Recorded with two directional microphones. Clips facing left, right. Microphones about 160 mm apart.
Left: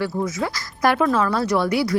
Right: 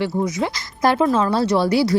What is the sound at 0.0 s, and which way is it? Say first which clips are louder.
A woman's voice: right 2 dB; 20° right (ahead or behind).